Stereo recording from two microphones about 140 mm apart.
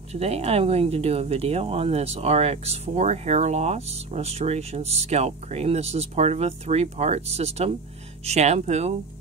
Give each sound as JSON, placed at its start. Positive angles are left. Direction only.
{"t": 0.1, "sound": "speech", "side_deg": -50}